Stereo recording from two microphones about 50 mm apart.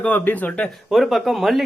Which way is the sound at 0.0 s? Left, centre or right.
Left.